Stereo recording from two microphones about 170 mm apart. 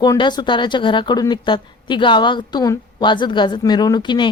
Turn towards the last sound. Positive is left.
turn(degrees=25)  # may be behind; listen again after turning